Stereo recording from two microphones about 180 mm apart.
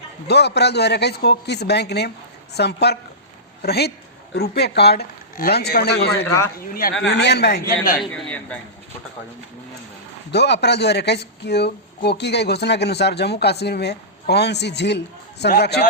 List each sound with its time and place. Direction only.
0.3 s speech: 65° left (ahead or behind)
8.1 s a man's voice: 5° left (ahead or behind)
10.3 s speech: 70° left (ahead or behind)